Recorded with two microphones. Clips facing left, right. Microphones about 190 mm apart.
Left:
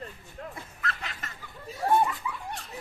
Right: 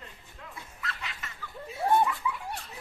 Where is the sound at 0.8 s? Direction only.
45° left (ahead or behind).